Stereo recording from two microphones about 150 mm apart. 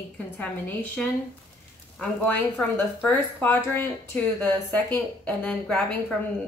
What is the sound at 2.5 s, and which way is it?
Speech, 10° left (ahead or behind).